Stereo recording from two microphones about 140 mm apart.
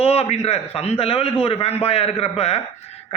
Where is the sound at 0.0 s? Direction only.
45° left (ahead or behind).